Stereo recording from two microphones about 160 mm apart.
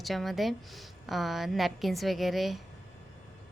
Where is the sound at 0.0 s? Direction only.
Centre (ahead or behind).